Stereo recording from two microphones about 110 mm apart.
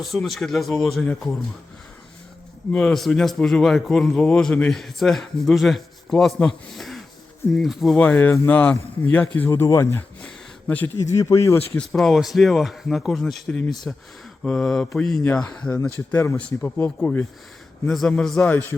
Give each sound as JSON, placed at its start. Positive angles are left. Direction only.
{"t": 0.0, "sound": "a man's voice", "side_deg": 0}
{"t": 2.7, "sound": "a man's voice", "side_deg": 5}
{"t": 7.9, "sound": "speech", "side_deg": 10}
{"t": 10.2, "sound": "a sound", "side_deg": 15}
{"t": 10.9, "sound": "speech", "side_deg": 30}
{"t": 11.8, "sound": "a man's voice", "side_deg": 5}
{"t": 18.4, "sound": "speech", "side_deg": 15}